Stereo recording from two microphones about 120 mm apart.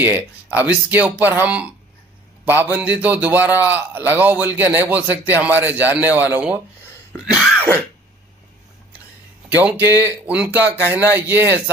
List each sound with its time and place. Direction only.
0.0 s a man's voice: 15° right (ahead or behind)
9.8 s a man's voice: 20° right (ahead or behind)